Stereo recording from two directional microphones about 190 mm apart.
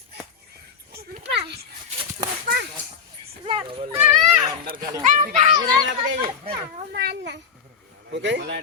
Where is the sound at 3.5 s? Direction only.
25° right (ahead or behind).